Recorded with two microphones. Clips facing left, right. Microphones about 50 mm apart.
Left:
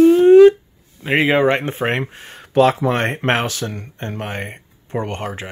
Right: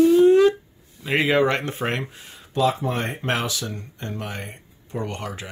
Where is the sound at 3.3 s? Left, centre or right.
Left.